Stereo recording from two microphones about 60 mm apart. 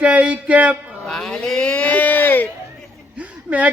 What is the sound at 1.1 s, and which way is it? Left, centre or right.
Speech, centre.